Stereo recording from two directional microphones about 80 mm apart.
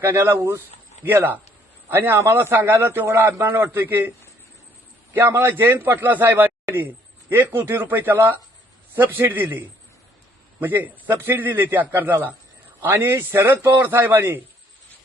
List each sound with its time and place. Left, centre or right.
0.0 s a man's voice: right
5.1 s a man's voice: right